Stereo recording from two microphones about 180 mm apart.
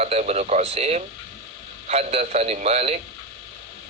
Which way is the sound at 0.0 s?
35° right (ahead or behind).